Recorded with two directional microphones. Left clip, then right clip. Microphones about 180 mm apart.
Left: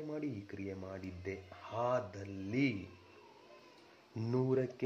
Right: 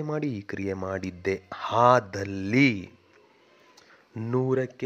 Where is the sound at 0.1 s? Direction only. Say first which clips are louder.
Right 12 dB; 40° right (ahead or behind).